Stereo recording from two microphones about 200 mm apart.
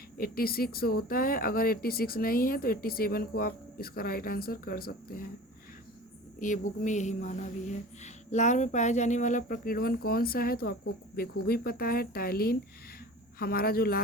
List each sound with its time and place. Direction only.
0.2 s a woman's voice: 50° left (ahead or behind)
6.4 s a woman's voice: 40° left (ahead or behind)